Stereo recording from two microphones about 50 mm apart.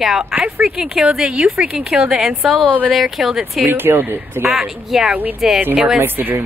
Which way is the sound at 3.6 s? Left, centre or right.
Right.